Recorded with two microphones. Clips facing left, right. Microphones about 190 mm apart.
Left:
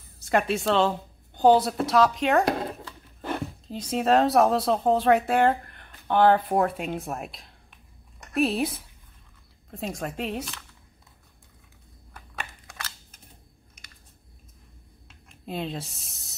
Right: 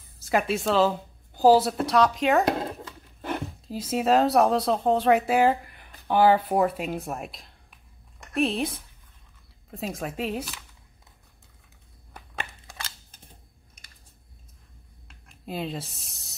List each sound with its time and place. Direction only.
0.2 s a woman's voice: centre (ahead or behind)
12.4 s scissors: 30° right (ahead or behind)
15.0 s writing: centre (ahead or behind)